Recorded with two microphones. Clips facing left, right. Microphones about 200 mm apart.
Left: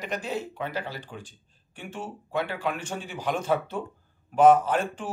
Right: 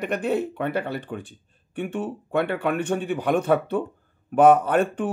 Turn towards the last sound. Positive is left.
turn(degrees=-60)  # may be behind; listen again after turning